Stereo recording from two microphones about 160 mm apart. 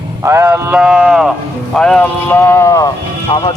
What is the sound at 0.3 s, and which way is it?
Speech, 15° right (ahead or behind).